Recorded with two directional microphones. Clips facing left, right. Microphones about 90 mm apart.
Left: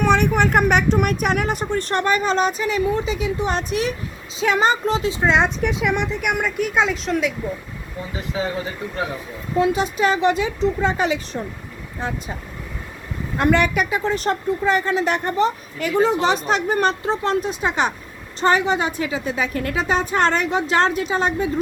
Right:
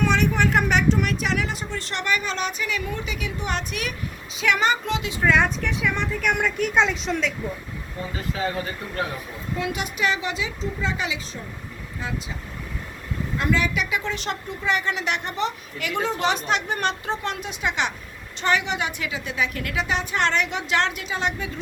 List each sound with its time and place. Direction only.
0.0 s speech: 50° left (ahead or behind); by 5.1 s 35° left (ahead or behind)
5.2 s speech: 25° left (ahead or behind)
6.3 s speech: 5° left (ahead or behind)
8.3 s speech: 15° left (ahead or behind)
9.6 s speech: 30° left (ahead or behind)
10.2 s speech: 50° left (ahead or behind)
13.3 s speech: 55° left (ahead or behind)
13.9 s speech: 40° left (ahead or behind)
15.9 s speech: 5° left (ahead or behind)
16.2 s speech: 35° left (ahead or behind)